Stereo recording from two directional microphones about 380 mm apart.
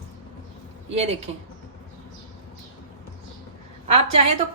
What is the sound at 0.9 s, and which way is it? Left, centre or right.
Speech, centre.